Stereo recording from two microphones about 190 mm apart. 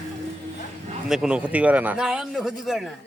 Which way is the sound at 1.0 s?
5° right (ahead or behind).